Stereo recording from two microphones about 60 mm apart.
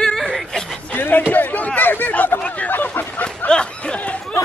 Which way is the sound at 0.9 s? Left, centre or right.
Left.